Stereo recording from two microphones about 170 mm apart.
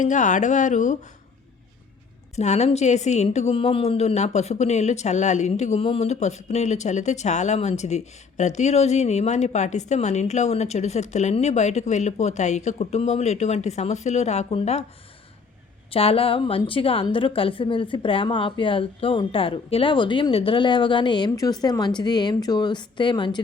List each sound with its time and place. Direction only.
0.0 s speech: 45° left (ahead or behind)
2.3 s a woman's voice: 40° left (ahead or behind)
15.9 s a woman's voice: 35° left (ahead or behind)